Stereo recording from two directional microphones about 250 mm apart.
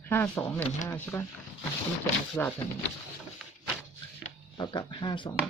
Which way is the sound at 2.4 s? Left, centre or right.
Centre.